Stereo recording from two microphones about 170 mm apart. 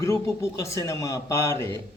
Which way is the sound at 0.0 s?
15° left (ahead or behind).